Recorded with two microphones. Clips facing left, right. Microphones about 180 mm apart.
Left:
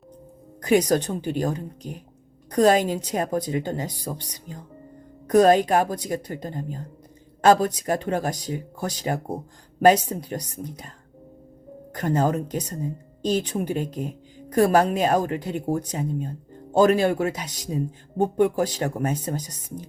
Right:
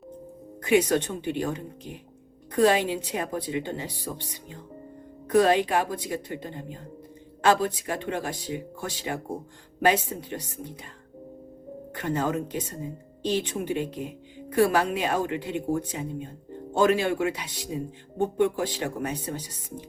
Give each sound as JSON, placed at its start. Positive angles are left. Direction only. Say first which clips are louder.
{"t": 0.6, "sound": "speech", "louder": "left 2 dB", "side_deg": 40}
{"t": 11.9, "sound": "speech", "louder": "left 4 dB", "side_deg": 40}